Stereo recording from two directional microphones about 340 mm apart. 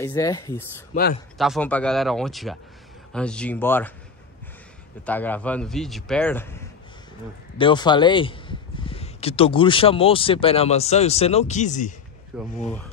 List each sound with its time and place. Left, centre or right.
0.0 s a man's voice: centre
5.0 s a man's voice: centre
7.5 s speech: centre
12.3 s a man's voice: centre